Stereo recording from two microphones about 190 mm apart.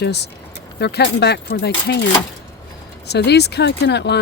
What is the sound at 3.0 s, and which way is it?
Speech, 60° left (ahead or behind).